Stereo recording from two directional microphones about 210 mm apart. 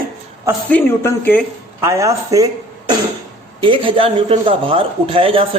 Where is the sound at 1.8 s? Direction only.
15° right (ahead or behind).